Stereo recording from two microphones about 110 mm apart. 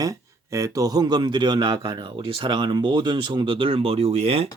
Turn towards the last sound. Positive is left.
turn(degrees=-65)  # may be behind; listen again after turning